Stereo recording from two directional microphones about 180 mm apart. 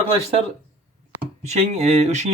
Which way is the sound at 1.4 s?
40° right (ahead or behind).